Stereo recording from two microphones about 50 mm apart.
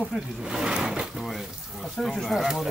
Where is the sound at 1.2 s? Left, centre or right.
Centre.